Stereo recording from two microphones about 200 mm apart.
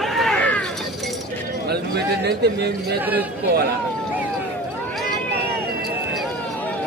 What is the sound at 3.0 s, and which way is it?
Speech, 10° right (ahead or behind).